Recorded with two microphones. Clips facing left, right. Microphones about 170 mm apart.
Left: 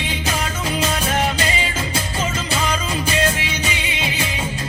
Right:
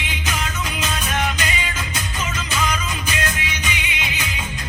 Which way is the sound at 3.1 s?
30° left (ahead or behind).